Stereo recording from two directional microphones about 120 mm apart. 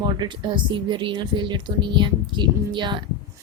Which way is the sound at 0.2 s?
40° right (ahead or behind).